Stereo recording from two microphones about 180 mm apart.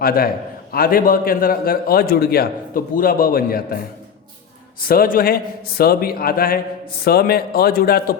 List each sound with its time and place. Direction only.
0.0 s a man's voice: 55° left (ahead or behind)
4.8 s a man's voice: 55° left (ahead or behind)